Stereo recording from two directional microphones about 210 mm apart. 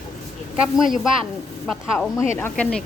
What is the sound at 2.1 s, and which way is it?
Speech, 10° left (ahead or behind).